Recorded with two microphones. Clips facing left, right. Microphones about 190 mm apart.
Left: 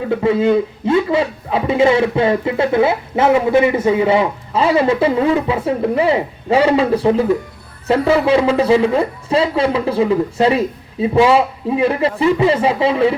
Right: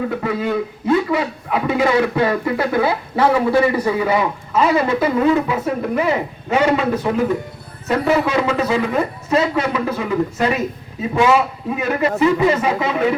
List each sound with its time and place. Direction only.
0.2 s speech: 25° left (ahead or behind)